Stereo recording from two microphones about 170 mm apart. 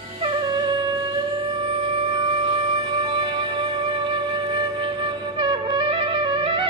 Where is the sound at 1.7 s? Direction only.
30° right (ahead or behind).